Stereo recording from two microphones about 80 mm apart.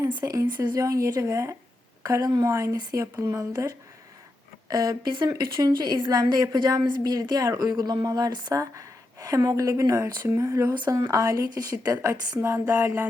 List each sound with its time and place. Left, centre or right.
0.2 s speech: right
5.0 s speech: right
5.3 s a woman's voice: right
8.5 s speech: right
11.4 s speech: right
12.4 s a sound: right